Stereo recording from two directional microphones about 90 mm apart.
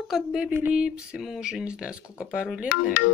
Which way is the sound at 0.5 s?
15° right (ahead or behind).